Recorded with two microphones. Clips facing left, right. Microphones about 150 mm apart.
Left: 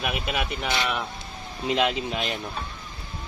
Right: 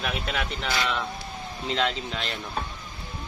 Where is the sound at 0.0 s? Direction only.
10° left (ahead or behind).